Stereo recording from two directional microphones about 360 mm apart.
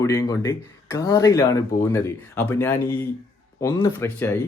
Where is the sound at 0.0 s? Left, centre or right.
Centre.